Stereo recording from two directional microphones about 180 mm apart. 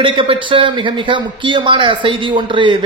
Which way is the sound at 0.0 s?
30° right (ahead or behind).